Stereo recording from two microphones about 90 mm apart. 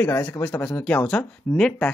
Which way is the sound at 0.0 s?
25° left (ahead or behind).